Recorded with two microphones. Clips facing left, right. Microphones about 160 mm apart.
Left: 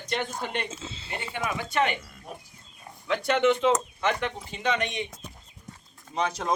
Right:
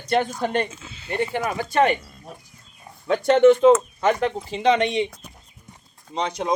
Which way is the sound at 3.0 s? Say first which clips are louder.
Right 9 dB; 45° right (ahead or behind).